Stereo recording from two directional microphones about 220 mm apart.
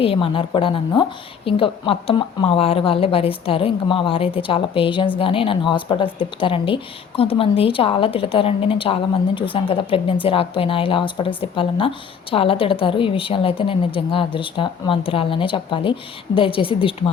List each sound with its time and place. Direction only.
0.0 s a woman's voice: 25° left (ahead or behind)